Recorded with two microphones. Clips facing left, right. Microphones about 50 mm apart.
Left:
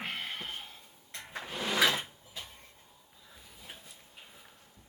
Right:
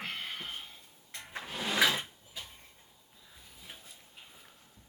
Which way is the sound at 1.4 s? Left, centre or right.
Centre.